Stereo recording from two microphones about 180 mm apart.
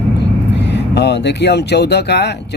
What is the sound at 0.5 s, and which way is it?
Speech, 75° left (ahead or behind).